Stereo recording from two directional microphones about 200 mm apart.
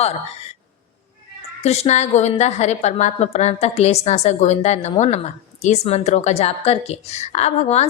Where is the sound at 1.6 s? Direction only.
30° left (ahead or behind).